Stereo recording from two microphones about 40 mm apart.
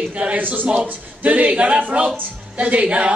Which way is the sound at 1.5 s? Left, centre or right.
Right.